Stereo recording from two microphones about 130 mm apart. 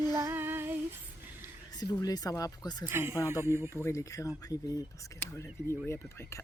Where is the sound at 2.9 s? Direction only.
20° right (ahead or behind).